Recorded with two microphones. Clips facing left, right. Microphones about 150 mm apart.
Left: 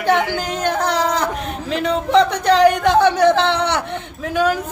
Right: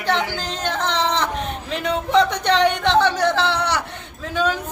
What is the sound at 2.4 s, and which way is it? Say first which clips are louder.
A woman's voice: left 5 dB; 5° left (ahead or behind).